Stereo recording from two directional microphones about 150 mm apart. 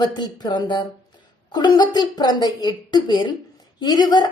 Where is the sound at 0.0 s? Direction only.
30° left (ahead or behind).